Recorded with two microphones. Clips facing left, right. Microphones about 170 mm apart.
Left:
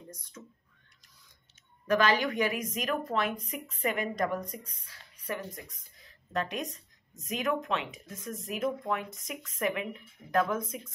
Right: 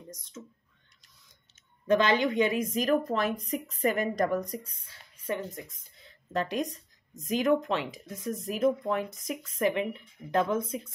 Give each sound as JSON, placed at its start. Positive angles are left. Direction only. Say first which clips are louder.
{"t": 0.1, "sound": "speech", "louder": "right 3 dB", "side_deg": -20}
{"t": 1.9, "sound": "speech", "louder": "right 2 dB", "side_deg": -25}
{"t": 4.6, "sound": "speech", "louder": "even", "side_deg": -25}